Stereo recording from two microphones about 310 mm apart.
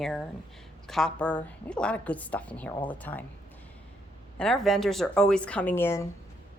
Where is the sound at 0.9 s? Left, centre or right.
Centre.